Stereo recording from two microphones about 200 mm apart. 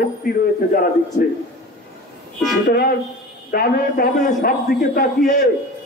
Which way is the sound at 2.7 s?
50° left (ahead or behind).